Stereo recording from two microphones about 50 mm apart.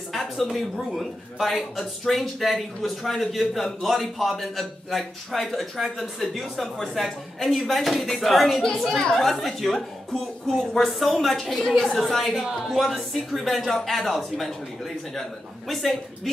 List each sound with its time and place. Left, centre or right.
0.1 s a man's voice: centre
9.2 s a man's voice: centre
15.7 s a man's voice: centre